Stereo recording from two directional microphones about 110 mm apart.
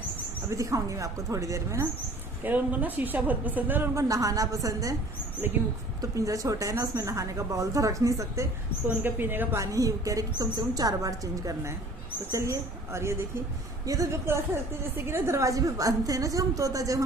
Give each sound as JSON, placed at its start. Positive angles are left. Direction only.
{"t": 0.5, "sound": "speech", "side_deg": -30}
{"t": 2.4, "sound": "a woman's voice", "side_deg": -15}
{"t": 3.9, "sound": "a woman's voice", "side_deg": -30}
{"t": 6.0, "sound": "speech", "side_deg": -30}
{"t": 8.9, "sound": "a woman's voice", "side_deg": -15}